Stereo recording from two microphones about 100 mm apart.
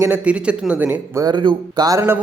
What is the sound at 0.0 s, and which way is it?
Speech, 15° right (ahead or behind).